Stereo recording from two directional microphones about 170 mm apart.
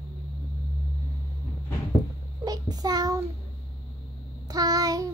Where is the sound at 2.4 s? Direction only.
20° right (ahead or behind).